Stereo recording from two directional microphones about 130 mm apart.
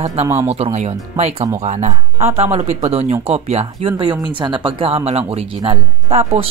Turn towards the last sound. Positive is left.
turn(degrees=-50)  # may be behind; listen again after turning